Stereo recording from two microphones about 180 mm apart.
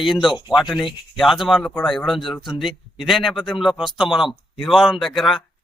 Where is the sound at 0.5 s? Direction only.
Centre (ahead or behind).